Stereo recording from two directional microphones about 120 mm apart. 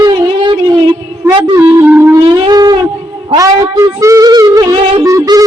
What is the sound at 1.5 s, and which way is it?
Music, 25° right (ahead or behind).